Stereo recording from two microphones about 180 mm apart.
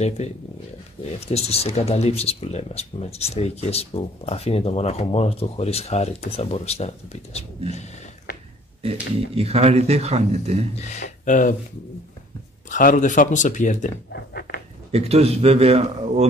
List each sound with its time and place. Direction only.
0.2 s speech: 35° left (ahead or behind)
9.3 s speech: 35° right (ahead or behind)
10.8 s speech: 40° left (ahead or behind)
12.6 s speech: 45° left (ahead or behind)
14.1 s pig: 60° left (ahead or behind)
14.9 s speech: 35° right (ahead or behind)